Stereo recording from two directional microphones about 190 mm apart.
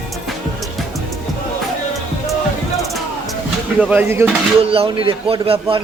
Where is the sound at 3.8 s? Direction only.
10° right (ahead or behind).